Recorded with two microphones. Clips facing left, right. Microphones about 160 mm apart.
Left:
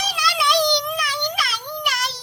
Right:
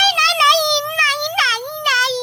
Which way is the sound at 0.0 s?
90° right.